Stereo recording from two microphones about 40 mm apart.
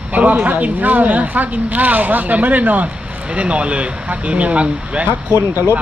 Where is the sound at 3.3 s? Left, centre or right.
Right.